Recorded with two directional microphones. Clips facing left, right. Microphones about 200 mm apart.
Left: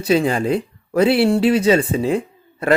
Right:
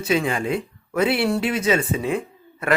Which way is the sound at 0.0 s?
35° left (ahead or behind).